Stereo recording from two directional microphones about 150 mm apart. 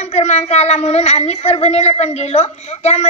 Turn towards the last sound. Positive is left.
turn(degrees=45)  # may be behind; listen again after turning